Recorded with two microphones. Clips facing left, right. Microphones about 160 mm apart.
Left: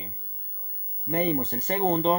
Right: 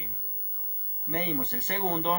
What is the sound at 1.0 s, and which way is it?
Speech, 40° left (ahead or behind).